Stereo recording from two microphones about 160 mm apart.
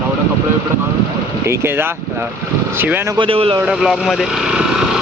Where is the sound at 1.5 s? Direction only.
15° right (ahead or behind).